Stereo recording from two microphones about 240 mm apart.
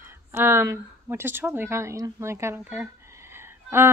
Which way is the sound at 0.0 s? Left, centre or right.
Centre.